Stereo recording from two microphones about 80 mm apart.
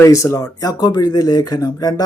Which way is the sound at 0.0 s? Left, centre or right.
Left.